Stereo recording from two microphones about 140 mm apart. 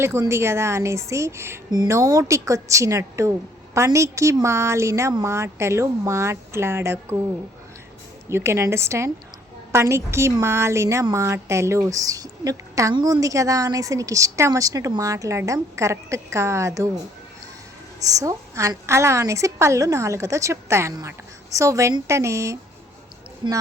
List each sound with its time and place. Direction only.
0.0 s speech: 20° right (ahead or behind)
8.3 s speech: 20° right (ahead or behind)
18.0 s speech: 25° right (ahead or behind)